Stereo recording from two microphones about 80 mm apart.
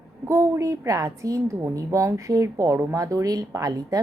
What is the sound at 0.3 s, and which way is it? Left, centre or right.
A woman's voice, right.